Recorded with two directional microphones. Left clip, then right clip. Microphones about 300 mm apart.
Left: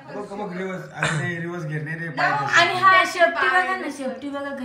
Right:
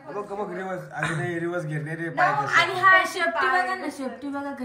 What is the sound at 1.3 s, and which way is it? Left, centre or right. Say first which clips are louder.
Speech: right 2 dB; centre.